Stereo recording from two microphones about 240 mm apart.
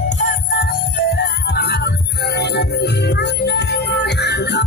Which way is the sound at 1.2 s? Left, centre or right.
Left.